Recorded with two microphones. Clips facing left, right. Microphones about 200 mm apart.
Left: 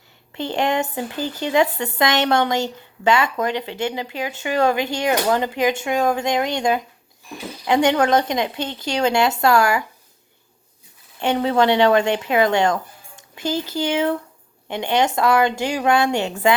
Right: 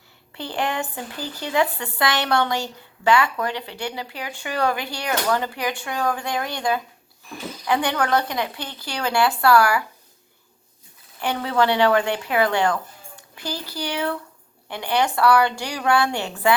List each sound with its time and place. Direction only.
0.3 s speech: 20° left (ahead or behind)
11.2 s speech: 25° left (ahead or behind)